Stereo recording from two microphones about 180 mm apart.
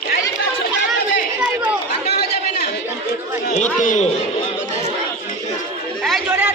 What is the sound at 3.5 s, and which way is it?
Chatter, 45° left (ahead or behind).